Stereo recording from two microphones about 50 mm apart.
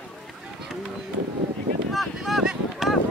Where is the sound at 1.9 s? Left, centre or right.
Centre.